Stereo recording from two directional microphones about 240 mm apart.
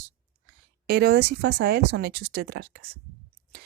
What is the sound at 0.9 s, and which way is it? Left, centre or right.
Speech, right.